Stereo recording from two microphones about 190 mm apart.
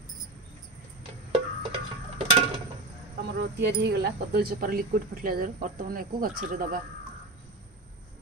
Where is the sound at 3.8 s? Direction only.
60° right (ahead or behind).